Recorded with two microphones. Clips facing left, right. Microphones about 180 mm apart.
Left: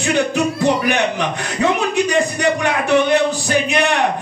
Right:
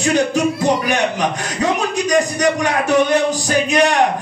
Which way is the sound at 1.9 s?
40° right (ahead or behind).